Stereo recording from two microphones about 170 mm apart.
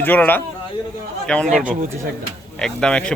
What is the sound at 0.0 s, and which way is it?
A man's voice, 10° left (ahead or behind).